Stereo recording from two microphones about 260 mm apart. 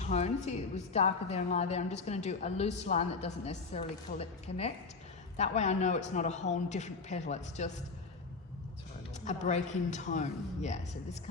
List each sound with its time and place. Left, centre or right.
0.0 s a woman's voice: left
9.2 s a woman's voice: left